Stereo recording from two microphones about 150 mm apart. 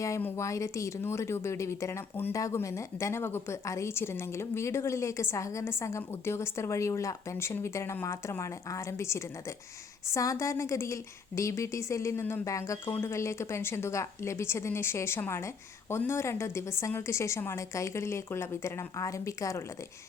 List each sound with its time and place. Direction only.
0.0 s speech: 15° left (ahead or behind)